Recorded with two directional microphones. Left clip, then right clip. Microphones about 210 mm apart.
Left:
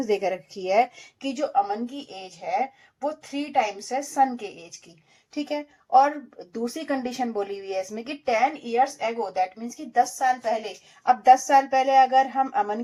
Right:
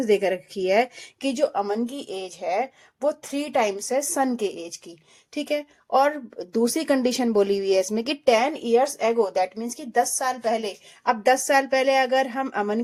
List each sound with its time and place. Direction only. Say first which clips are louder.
0.0 s speech: right 3 dB; 30° right (ahead or behind)
1.2 s a woman's voice: right 1 dB; 45° right (ahead or behind)